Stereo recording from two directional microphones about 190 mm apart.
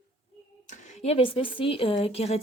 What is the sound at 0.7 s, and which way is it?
Speech, 35° left (ahead or behind).